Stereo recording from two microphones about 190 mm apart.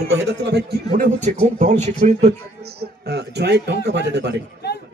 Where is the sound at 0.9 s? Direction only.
40° right (ahead or behind).